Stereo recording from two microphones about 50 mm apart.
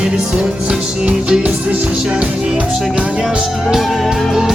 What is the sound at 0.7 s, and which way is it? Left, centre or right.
Music, centre.